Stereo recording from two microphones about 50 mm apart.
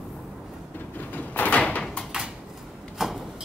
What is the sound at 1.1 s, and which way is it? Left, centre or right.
Door, left.